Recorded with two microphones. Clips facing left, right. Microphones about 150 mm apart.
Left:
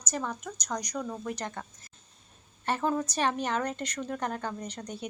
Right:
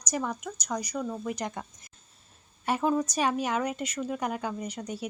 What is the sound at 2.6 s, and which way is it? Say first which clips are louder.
A woman's voice: right 2 dB; 10° right (ahead or behind).